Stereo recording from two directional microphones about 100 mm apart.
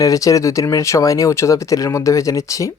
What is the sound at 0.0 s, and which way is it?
Speech, 35° left (ahead or behind).